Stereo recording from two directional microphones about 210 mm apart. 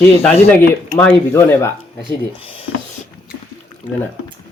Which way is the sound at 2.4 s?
25° left (ahead or behind).